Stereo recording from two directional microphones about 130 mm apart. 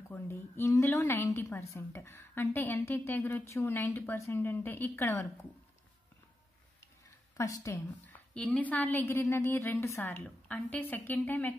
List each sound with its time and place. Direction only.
0.1 s a woman's voice: 20° left (ahead or behind)
7.3 s speech: 25° left (ahead or behind)
8.4 s a woman's voice: 10° left (ahead or behind)